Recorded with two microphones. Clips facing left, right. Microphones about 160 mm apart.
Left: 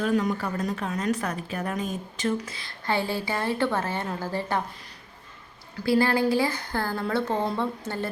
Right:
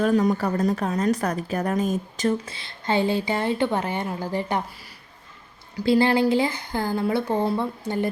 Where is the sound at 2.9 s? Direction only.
20° right (ahead or behind).